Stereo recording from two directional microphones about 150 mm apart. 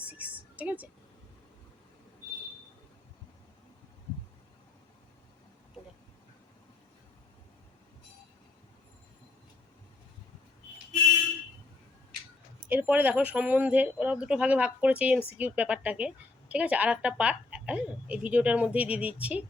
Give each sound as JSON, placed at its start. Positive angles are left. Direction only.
{"t": 0.0, "sound": "music", "side_deg": -10}
{"t": 12.6, "sound": "a woman's voice", "side_deg": -10}